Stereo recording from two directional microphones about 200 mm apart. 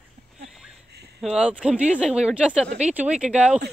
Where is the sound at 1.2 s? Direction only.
5° right (ahead or behind).